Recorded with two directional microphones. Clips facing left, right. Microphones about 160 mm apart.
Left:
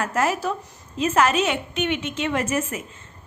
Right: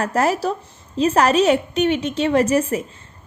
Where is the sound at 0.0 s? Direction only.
35° right (ahead or behind).